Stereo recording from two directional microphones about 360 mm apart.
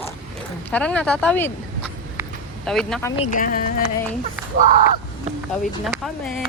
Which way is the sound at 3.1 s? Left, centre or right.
Centre.